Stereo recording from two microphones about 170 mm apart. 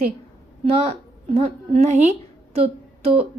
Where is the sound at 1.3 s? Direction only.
40° right (ahead or behind).